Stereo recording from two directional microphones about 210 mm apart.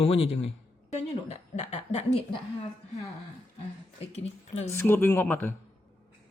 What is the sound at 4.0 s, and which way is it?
Speech, 30° left (ahead or behind).